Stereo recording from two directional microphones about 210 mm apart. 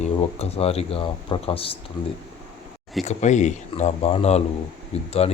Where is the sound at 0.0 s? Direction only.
30° left (ahead or behind).